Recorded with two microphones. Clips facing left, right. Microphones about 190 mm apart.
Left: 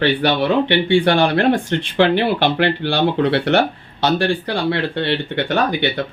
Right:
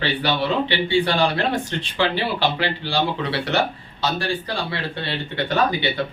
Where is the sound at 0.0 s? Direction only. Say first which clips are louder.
Left 6 dB; 55° left (ahead or behind).